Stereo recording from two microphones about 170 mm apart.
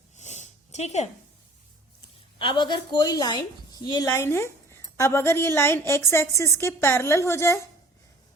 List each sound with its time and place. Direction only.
0.2 s sniff: 45° left (ahead or behind)
2.4 s a woman's voice: 25° left (ahead or behind)